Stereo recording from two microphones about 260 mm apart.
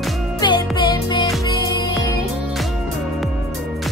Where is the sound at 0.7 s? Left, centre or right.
Centre.